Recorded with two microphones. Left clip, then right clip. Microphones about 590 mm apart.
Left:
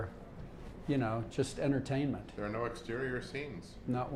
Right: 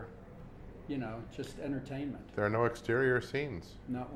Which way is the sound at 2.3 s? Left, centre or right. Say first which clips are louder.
Right 12 dB; right.